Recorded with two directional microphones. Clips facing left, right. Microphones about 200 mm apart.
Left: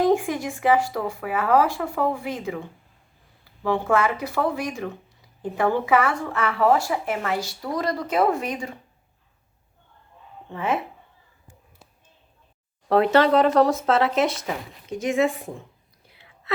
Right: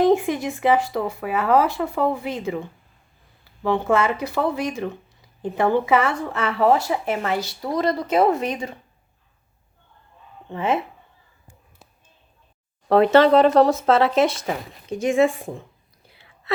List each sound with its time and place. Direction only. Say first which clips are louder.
0.0 s speech: right 3 dB; 25° right (ahead or behind)
3.6 s speech: right 2 dB; 25° right (ahead or behind)
10.5 s speech: right 3 dB; 25° right (ahead or behind)
12.9 s speech: right 3 dB; 25° right (ahead or behind)